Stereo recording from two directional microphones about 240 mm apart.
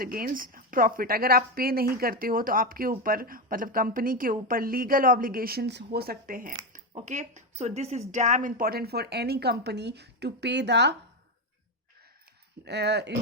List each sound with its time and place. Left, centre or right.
0.0 s a woman's voice: right
12.6 s speech: right